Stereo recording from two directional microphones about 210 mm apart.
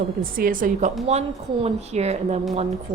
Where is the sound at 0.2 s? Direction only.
40° right (ahead or behind).